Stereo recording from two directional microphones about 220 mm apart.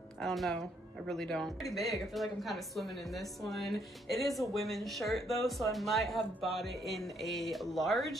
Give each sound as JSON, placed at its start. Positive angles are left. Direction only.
{"t": 0.2, "sound": "speech", "side_deg": 0}